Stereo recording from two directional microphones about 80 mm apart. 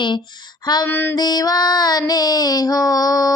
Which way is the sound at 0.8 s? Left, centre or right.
Left.